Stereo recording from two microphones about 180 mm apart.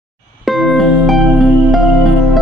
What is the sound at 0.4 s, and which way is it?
Music, centre (ahead or behind).